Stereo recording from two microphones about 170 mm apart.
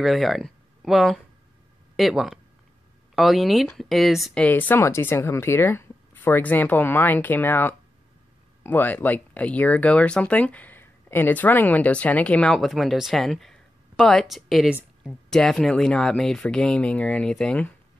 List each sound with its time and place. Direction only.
0.0 s speech: centre (ahead or behind)